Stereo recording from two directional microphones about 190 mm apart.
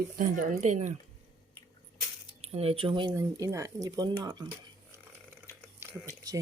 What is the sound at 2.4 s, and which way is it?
Speech, 30° right (ahead or behind).